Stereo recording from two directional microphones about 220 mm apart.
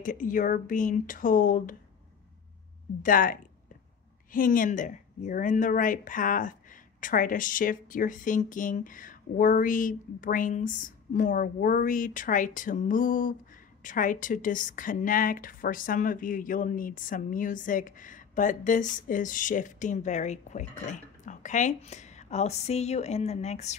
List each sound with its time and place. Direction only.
0.0 s a woman's voice: 35° left (ahead or behind)
3.0 s a woman's voice: 40° left (ahead or behind)